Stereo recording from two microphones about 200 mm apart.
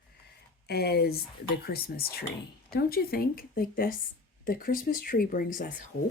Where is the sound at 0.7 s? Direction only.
50° left (ahead or behind).